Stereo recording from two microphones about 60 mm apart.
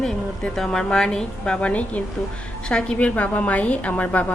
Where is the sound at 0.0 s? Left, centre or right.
Centre.